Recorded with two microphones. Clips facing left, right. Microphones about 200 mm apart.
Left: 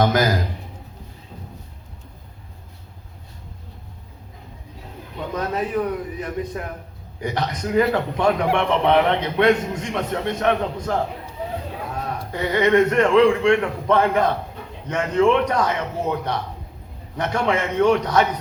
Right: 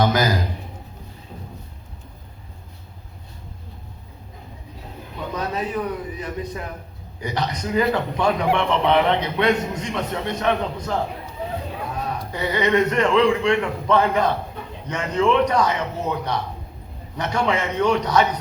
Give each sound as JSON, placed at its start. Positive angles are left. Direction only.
{"t": 0.0, "sound": "a man's voice", "side_deg": 50}
{"t": 5.3, "sound": "a man's voice", "side_deg": 50}
{"t": 12.3, "sound": "a man's voice", "side_deg": 50}